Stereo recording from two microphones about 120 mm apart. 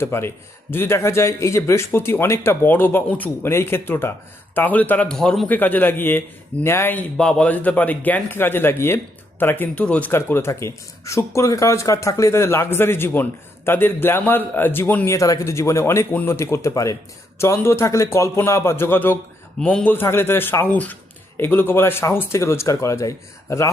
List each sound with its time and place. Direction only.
0.0 s a man's voice: 20° left (ahead or behind)